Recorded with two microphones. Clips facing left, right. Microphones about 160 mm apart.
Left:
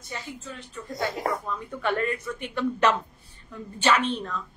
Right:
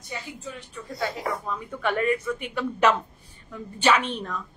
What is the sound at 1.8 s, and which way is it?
A woman's voice, 10° right (ahead or behind).